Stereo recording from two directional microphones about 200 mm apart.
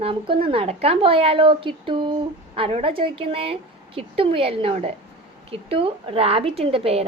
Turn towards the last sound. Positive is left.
turn(degrees=-30)  # may be behind; listen again after turning